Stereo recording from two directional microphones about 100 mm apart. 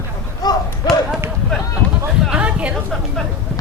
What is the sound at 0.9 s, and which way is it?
Run, 5° left (ahead or behind).